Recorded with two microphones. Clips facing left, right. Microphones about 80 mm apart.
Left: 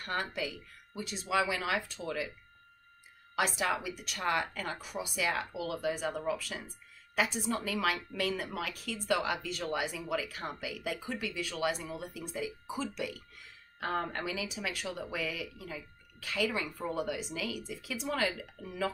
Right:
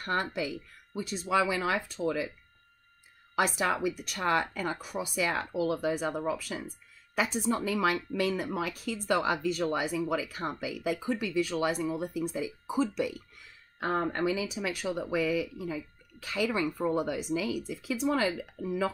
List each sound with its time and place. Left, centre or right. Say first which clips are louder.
0.0 s speech: right 4 dB; right
3.3 s speech: right 3 dB; right